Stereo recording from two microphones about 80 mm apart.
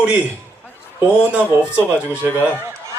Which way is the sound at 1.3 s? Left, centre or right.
Right.